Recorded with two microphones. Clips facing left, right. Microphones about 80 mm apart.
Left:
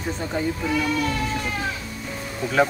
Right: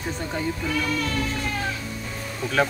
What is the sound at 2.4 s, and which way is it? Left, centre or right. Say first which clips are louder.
Speech: left 2 dB; centre.